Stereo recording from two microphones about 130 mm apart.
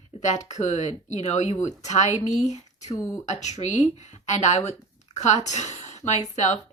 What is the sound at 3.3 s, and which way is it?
Speech, 60° left (ahead or behind).